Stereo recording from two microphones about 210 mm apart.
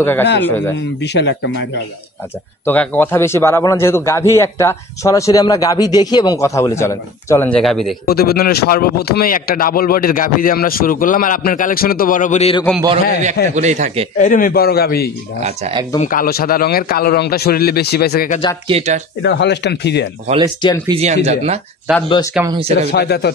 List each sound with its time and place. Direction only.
0.0 s a man's voice: 10° left (ahead or behind)
1.0 s speech: 55° left (ahead or behind)
2.6 s a man's voice: 10° left (ahead or behind)
8.0 s speech: 45° left (ahead or behind); by 12.6 s 30° left (ahead or behind)
13.6 s speech: 35° right (ahead or behind)
14.1 s speech: 40° left (ahead or behind)
15.4 s speech: 30° right (ahead or behind)
16.0 s speech: 40° left (ahead or behind)
18.7 s speech: 30° right (ahead or behind)
19.2 s speech: 55° left (ahead or behind)
20.9 s speech: 30° right (ahead or behind)
22.8 s speech: 50° left (ahead or behind)